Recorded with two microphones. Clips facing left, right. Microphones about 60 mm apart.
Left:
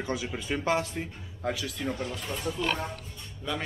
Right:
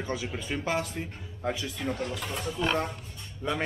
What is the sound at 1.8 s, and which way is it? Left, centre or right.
Speech, centre.